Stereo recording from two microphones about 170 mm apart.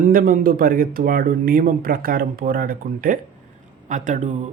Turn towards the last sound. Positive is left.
turn(degrees=-45)  # may be behind; listen again after turning